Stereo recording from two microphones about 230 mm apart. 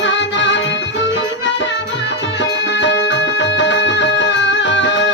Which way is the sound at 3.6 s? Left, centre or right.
Left.